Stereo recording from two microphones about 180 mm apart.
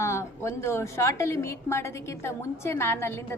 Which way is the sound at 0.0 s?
15° left (ahead or behind).